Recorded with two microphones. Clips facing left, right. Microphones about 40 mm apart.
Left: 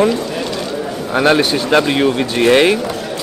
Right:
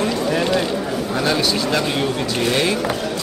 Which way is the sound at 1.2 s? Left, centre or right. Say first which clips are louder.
Left 8 dB; left.